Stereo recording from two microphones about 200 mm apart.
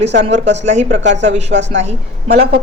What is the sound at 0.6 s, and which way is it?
Speech, 35° right (ahead or behind).